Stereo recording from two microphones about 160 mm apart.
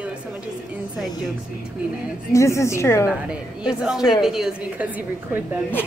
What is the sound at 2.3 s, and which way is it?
Speech, 20° left (ahead or behind).